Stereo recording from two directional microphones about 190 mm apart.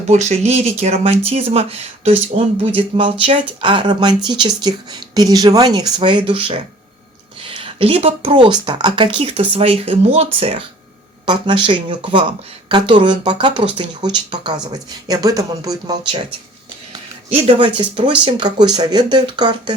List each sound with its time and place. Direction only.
0.1 s speech: 35° right (ahead or behind); by 16.0 s 20° right (ahead or behind)
16.9 s speech: 30° right (ahead or behind)